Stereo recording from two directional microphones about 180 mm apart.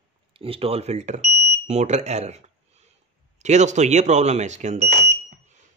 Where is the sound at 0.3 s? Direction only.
30° right (ahead or behind).